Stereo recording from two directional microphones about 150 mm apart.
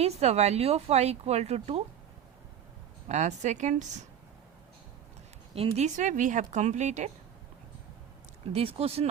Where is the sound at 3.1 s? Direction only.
50° right (ahead or behind).